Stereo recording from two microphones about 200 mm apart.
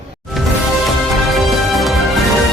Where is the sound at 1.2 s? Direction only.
Centre (ahead or behind).